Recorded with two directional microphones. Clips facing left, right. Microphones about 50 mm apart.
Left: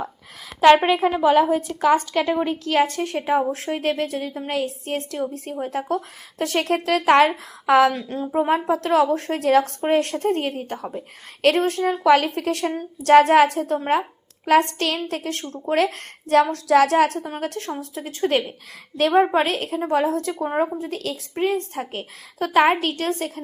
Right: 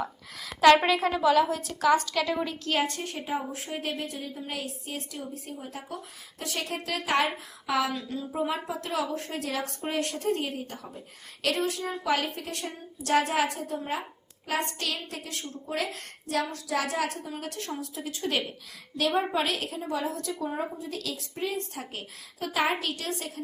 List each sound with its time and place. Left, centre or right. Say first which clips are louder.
0.6 s a woman's voice: left 5 dB; left
1.2 s a woman's voice: left 6 dB; left
17.2 s a woman's voice: left 8 dB; left